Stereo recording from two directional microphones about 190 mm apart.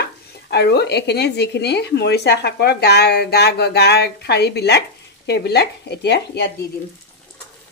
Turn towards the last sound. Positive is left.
turn(degrees=60)  # may be behind; listen again after turning